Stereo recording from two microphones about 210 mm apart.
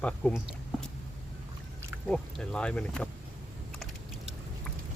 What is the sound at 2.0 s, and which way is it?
Speech, 5° left (ahead or behind).